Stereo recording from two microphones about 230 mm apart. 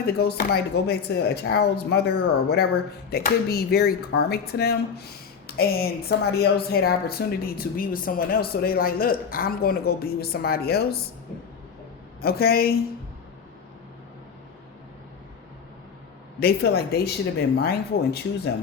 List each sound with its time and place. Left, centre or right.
0.0 s speech: left
12.2 s speech: left
16.4 s speech: left